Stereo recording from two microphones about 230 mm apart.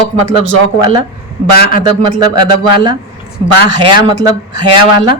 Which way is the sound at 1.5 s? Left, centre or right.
Left.